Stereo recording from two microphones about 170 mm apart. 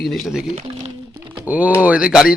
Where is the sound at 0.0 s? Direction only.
Centre (ahead or behind).